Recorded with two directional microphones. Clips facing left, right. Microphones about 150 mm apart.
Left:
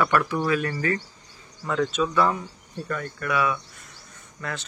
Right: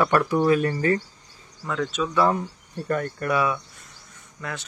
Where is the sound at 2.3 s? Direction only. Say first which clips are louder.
Right 3 dB; 50° right (ahead or behind).